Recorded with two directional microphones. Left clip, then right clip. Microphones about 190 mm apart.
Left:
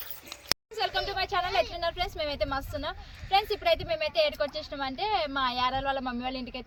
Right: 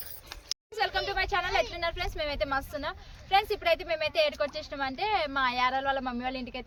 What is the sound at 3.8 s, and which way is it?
Speech, 20° right (ahead or behind).